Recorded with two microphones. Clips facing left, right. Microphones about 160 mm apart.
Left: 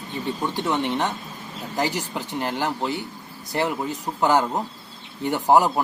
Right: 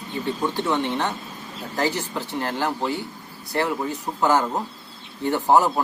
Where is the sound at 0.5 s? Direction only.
15° left (ahead or behind).